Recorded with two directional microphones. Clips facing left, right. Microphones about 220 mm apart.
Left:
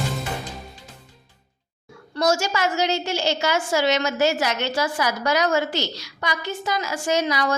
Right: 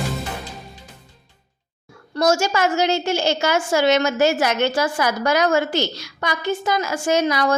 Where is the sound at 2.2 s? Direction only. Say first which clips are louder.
Right 3 dB; 50° right (ahead or behind).